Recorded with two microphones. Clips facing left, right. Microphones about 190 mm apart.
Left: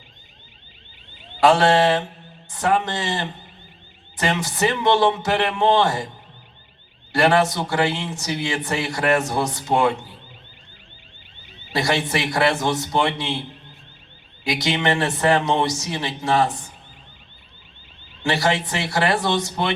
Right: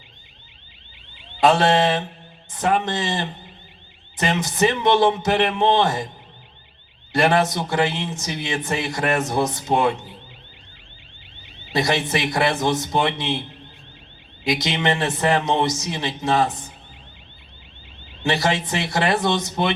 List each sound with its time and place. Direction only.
1.4 s a man's voice: 20° right (ahead or behind)
7.1 s a man's voice: 20° right (ahead or behind)
11.7 s a man's voice: 20° right (ahead or behind)
14.4 s a man's voice: 20° right (ahead or behind)
18.2 s a man's voice: 20° right (ahead or behind)